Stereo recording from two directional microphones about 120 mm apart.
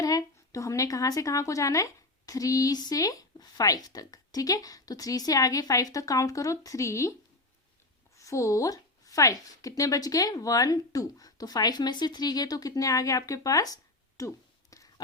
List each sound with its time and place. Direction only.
0.0 s speech: 30° left (ahead or behind)
8.1 s speech: 25° left (ahead or behind)
14.2 s a sound: 25° left (ahead or behind)